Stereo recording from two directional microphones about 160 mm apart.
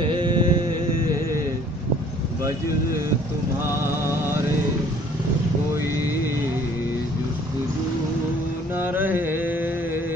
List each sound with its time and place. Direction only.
0.0 s music: 30° right (ahead or behind)
3.6 s a sound: 15° right (ahead or behind)
8.7 s carnatic music: 15° right (ahead or behind)